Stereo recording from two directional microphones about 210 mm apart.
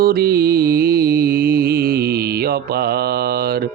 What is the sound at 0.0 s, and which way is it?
Music, 45° right (ahead or behind).